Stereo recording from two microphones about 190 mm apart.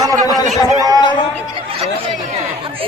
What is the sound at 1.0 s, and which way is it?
Speech, 25° left (ahead or behind).